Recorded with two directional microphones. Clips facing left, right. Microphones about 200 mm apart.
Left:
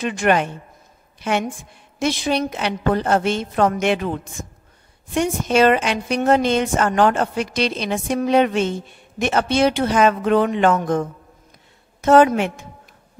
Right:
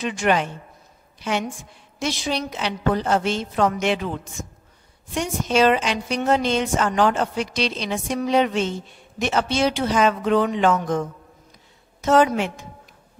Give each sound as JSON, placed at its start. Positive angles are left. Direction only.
{"t": 0.0, "sound": "a woman's voice", "side_deg": 55}